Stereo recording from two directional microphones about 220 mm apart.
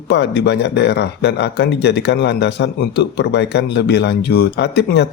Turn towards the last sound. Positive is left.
turn(degrees=50)  # may be behind; listen again after turning